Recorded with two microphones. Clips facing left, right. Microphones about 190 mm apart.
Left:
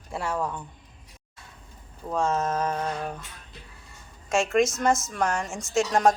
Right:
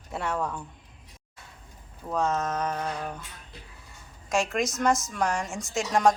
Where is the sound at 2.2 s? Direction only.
30° left (ahead or behind).